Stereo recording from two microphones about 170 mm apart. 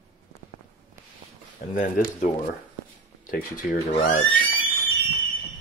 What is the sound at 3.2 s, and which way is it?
Speech, 55° left (ahead or behind).